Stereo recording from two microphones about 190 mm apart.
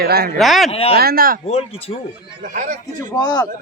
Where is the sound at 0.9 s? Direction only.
50° right (ahead or behind).